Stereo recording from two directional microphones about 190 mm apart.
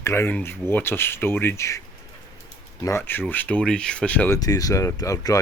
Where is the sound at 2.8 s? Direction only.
15° left (ahead or behind).